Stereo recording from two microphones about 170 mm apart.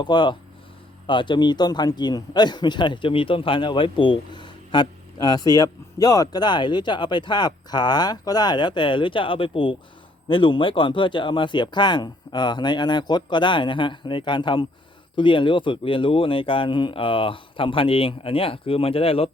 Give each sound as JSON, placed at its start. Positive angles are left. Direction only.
{"t": 0.0, "sound": "a man's voice", "side_deg": 25}